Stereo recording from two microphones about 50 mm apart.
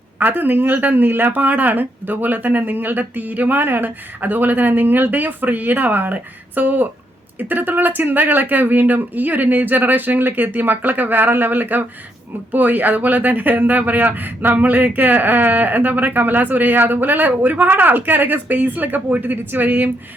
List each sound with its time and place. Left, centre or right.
0.2 s speech: right